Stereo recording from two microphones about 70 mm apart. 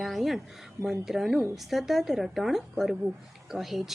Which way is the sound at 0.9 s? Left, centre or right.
Centre.